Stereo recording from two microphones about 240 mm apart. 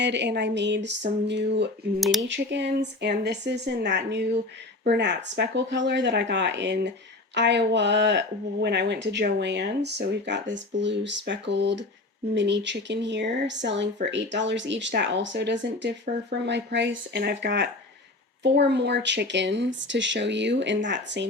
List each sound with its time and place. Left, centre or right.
0.0 s speech: right
2.0 s speech: centre
2.2 s speech: right